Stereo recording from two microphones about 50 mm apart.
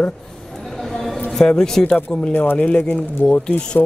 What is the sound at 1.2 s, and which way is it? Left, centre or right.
Speech, centre.